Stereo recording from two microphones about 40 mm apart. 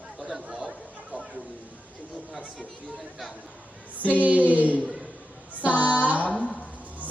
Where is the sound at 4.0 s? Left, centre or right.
Right.